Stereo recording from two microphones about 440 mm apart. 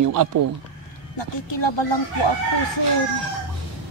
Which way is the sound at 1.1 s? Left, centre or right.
Left.